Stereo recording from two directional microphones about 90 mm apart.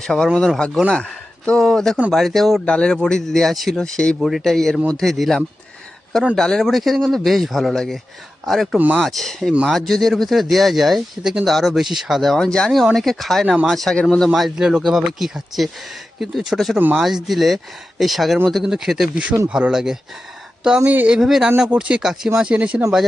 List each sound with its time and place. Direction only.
0.0 s speech: 5° left (ahead or behind)
14.3 s speech: centre (ahead or behind)
16.7 s speech: 15° right (ahead or behind)
17.2 s speech: centre (ahead or behind); by 21.2 s 20° right (ahead or behind)
21.2 s speech: centre (ahead or behind)
21.7 s speech: 15° right (ahead or behind)